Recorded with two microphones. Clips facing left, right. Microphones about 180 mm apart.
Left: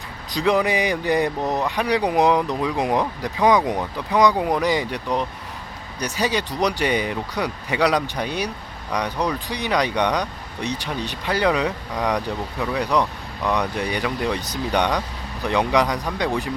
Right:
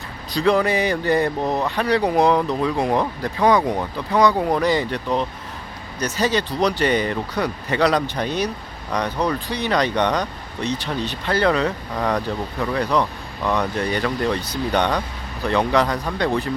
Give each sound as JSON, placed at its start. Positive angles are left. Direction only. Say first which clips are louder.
{"t": 0.3, "sound": "speech", "louder": "right 2 dB", "side_deg": 15}